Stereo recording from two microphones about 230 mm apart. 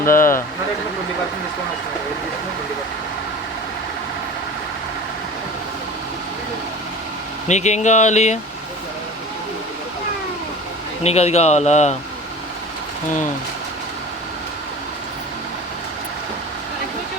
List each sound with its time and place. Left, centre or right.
0.0 s speech: left
7.4 s speech: left
11.0 s speech: left